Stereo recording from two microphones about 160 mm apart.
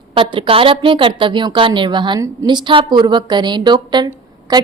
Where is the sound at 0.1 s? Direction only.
35° right (ahead or behind).